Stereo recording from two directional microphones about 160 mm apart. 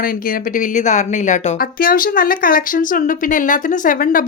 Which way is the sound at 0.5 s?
50° left (ahead or behind).